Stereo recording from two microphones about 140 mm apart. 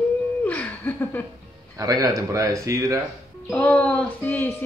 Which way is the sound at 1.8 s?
25° right (ahead or behind).